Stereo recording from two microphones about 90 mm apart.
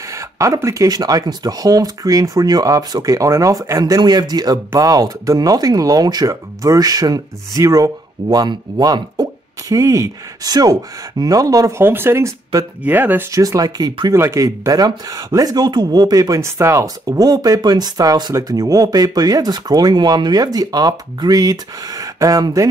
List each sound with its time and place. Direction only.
0.1 s speech: 35° right (ahead or behind)
11.8 s speech: 25° right (ahead or behind)
13.3 s speech: 40° right (ahead or behind)
14.1 s speech: 30° right (ahead or behind)